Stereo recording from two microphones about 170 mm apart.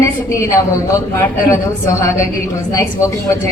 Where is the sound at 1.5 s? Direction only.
15° left (ahead or behind).